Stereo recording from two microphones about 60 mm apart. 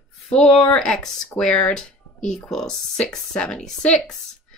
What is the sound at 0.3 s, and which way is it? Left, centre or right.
A woman's voice, centre.